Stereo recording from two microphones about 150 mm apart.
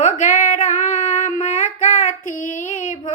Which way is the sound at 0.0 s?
60° left (ahead or behind).